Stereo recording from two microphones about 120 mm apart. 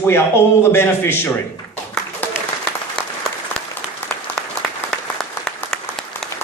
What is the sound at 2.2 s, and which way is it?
Applause, 15° left (ahead or behind).